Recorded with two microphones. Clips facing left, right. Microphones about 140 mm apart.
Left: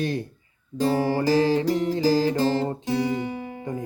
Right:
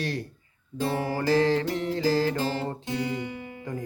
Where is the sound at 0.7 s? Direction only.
40° left (ahead or behind).